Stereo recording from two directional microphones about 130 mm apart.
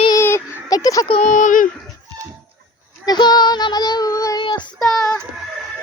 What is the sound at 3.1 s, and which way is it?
Child singing, 35° left (ahead or behind).